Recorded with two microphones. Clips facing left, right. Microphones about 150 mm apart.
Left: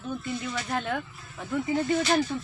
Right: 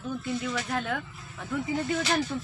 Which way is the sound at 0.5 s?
Centre (ahead or behind).